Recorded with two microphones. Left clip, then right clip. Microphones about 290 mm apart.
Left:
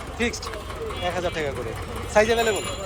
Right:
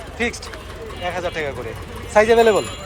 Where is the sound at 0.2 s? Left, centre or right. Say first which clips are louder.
Right 3 dB; centre.